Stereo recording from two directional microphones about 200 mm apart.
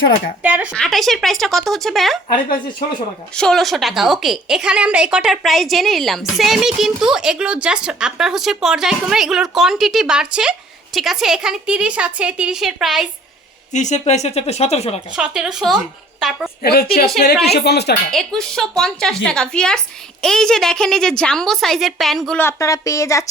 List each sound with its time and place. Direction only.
0.4 s a woman's voice: 5° right (ahead or behind)
3.3 s a woman's voice: centre (ahead or behind)
13.7 s speech: 35° left (ahead or behind)
15.1 s a woman's voice: 5° right (ahead or behind)
16.6 s speech: 50° left (ahead or behind)
18.1 s a woman's voice: centre (ahead or behind)
22.4 s speech: 15° left (ahead or behind)